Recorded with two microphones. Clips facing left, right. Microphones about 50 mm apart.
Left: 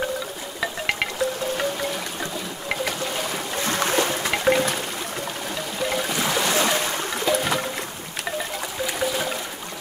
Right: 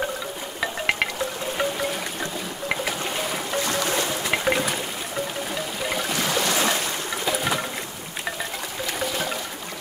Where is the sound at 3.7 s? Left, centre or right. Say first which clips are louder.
Left 2 dB; left.